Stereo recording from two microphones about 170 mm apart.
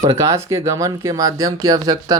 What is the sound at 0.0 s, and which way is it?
Speech, 20° right (ahead or behind).